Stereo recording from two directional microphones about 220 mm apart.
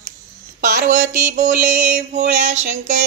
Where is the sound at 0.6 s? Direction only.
35° right (ahead or behind).